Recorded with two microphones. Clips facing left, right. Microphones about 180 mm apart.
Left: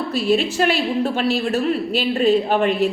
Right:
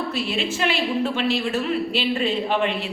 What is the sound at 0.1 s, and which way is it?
A woman's voice, 40° left (ahead or behind).